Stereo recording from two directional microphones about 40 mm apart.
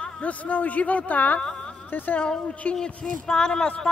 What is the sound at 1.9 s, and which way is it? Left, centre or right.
Speech, left.